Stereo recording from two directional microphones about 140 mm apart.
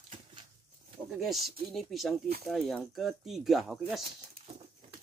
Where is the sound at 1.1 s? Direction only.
Centre (ahead or behind).